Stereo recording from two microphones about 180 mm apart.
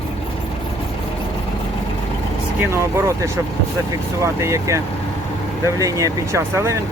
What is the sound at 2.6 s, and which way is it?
Speech, 15° right (ahead or behind).